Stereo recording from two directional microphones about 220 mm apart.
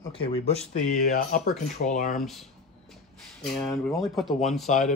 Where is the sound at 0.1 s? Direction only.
25° left (ahead or behind).